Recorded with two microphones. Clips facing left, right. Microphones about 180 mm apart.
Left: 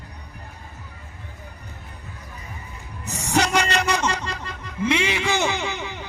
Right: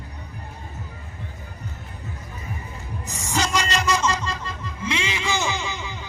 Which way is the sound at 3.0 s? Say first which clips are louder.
Left 4 dB; 65° left (ahead or behind).